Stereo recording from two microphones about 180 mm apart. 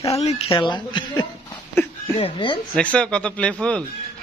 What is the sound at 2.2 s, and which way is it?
Speech, 25° left (ahead or behind).